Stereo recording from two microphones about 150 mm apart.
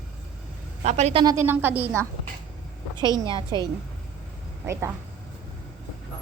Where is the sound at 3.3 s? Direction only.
30° right (ahead or behind).